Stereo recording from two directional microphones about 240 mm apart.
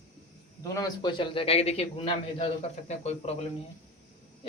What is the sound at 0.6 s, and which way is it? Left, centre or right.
A man's voice, centre.